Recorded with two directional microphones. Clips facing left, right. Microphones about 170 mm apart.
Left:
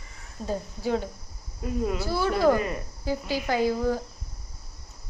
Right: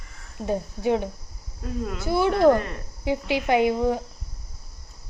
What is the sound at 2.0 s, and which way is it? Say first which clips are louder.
Speech: right 9 dB; 20° right (ahead or behind).